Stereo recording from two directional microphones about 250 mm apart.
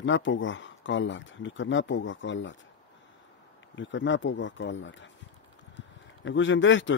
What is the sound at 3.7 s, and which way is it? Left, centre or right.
Speech, left.